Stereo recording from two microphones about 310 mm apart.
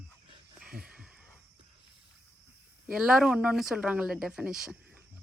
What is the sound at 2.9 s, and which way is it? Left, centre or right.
Speech, centre.